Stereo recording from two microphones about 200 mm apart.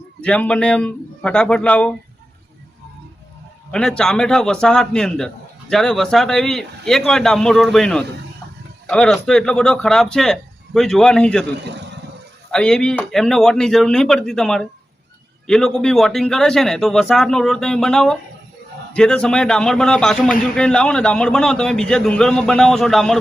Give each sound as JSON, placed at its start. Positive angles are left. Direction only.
{"t": 0.2, "sound": "a man's voice", "side_deg": 5}
{"t": 3.7, "sound": "a man's voice", "side_deg": 5}
{"t": 11.6, "sound": "a sound", "side_deg": -60}
{"t": 12.5, "sound": "a man's voice", "side_deg": 5}